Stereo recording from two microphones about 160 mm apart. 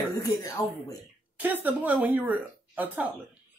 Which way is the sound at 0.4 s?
20° left (ahead or behind).